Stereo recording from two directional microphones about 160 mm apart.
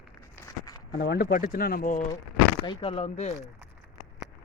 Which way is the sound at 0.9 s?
85° left.